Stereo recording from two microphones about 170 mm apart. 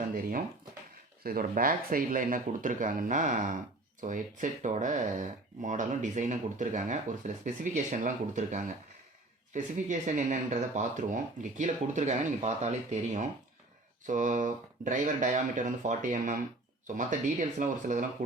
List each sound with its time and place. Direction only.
0.1 s speech: 55° right (ahead or behind)